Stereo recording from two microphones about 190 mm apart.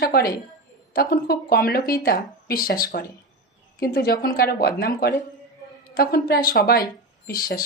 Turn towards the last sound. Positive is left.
turn(degrees=50)  # may be behind; listen again after turning